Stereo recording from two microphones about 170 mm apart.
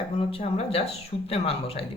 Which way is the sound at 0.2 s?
35° left (ahead or behind).